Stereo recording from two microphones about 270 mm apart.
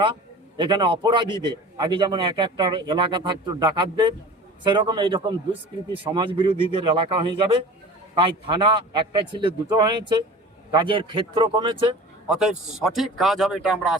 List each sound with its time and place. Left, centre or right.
0.0 s a man's voice: centre
12.3 s a man's voice: centre